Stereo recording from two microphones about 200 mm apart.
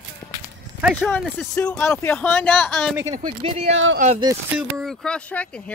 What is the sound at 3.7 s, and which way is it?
Speech, 70° right (ahead or behind).